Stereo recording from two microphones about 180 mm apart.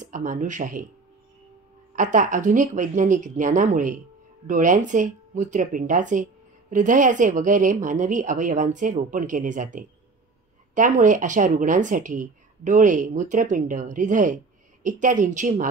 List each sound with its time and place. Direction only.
0.0 s speech: 45° right (ahead or behind)
2.0 s speech: 45° right (ahead or behind)